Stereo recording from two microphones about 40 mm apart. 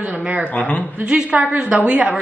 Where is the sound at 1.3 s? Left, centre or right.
Right.